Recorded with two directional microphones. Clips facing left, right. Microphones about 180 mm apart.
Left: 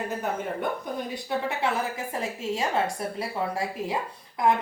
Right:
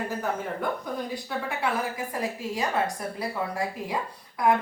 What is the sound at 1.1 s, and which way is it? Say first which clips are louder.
A woman's voice: left 2 dB; 25° left (ahead or behind).